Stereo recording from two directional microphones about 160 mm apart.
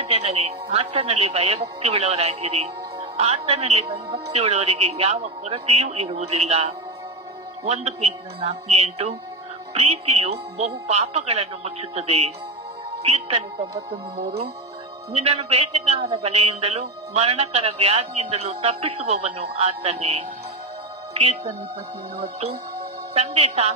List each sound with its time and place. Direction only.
0.0 s a man's voice: 40° right (ahead or behind)
15.1 s a man's voice: 40° right (ahead or behind)
22.1 s speech: 80° right
23.1 s a man's voice: 40° right (ahead or behind)